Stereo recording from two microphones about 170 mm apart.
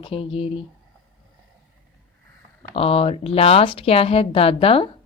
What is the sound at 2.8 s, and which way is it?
A woman's voice, 35° left (ahead or behind).